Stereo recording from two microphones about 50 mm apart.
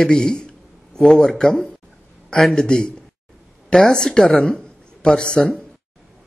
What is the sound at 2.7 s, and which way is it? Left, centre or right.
A man's voice, centre.